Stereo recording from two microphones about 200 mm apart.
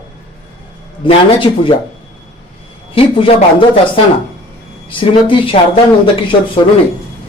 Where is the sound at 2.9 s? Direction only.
25° left (ahead or behind).